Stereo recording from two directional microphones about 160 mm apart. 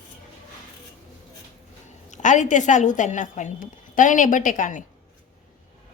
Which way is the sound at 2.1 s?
50° left (ahead or behind).